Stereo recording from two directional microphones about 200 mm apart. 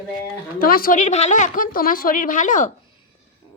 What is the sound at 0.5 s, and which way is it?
A woman's voice, 45° left (ahead or behind).